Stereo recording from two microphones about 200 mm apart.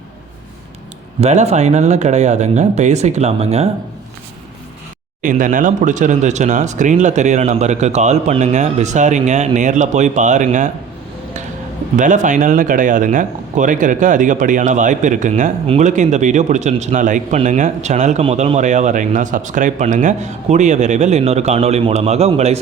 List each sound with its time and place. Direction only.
1.2 s speech: 35° right (ahead or behind)
5.2 s speech: 40° right (ahead or behind)
11.9 s speech: 40° right (ahead or behind)